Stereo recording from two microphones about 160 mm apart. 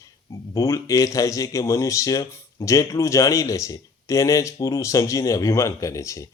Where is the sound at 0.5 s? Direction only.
20° left (ahead or behind).